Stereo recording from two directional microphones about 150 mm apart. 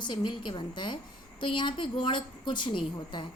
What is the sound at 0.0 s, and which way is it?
A woman's voice, 30° left (ahead or behind).